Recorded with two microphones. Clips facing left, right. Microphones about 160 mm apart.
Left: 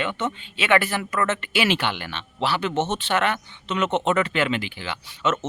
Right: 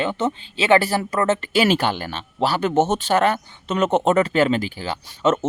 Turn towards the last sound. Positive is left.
turn(degrees=-40)  # may be behind; listen again after turning